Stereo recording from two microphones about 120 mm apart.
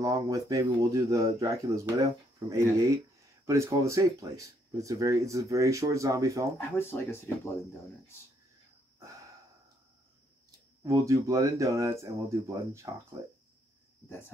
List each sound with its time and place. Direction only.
0.0 s speech: 30° right (ahead or behind)
6.8 s speech: 20° left (ahead or behind)
10.8 s speech: 30° right (ahead or behind)